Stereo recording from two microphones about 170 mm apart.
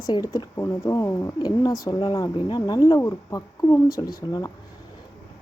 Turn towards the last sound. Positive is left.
turn(degrees=20)  # may be behind; listen again after turning